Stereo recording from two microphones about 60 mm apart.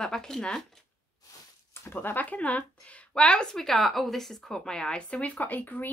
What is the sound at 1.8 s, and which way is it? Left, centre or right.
A woman's voice, left.